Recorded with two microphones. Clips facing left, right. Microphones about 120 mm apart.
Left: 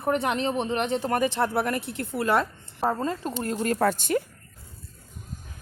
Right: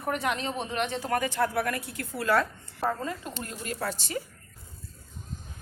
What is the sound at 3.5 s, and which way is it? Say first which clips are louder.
Speech: left 11 dB; 50° left (ahead or behind).